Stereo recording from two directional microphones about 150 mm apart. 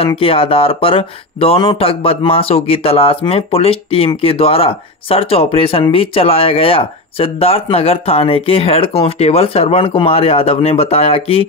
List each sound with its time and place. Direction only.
0.0 s speech: 40° left (ahead or behind)